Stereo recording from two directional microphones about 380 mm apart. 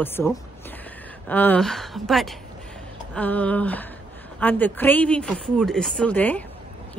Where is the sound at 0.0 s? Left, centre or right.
Centre.